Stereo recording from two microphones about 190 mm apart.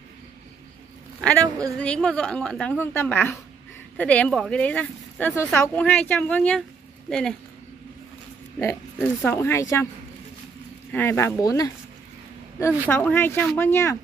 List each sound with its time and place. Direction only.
1.4 s speech: 20° right (ahead or behind)
1.8 s a woman's voice: 5° left (ahead or behind)
8.5 s speech: 15° left (ahead or behind)
10.9 s speech: 10° left (ahead or behind)